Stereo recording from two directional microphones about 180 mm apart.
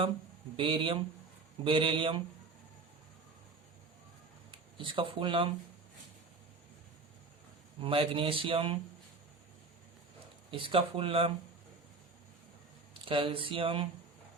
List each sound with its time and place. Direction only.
0.5 s speech: 30° right (ahead or behind)
4.8 s speech: 30° right (ahead or behind)
7.8 s speech: 30° right (ahead or behind)
10.5 s speech: 30° right (ahead or behind)
12.9 s speech: 30° right (ahead or behind)